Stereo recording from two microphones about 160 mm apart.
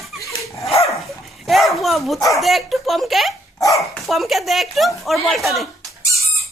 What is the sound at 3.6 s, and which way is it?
Speech, 20° left (ahead or behind).